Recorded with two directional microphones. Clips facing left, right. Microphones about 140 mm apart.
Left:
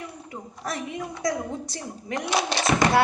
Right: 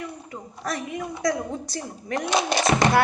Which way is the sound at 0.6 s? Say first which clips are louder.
Right 2 dB; 25° left (ahead or behind).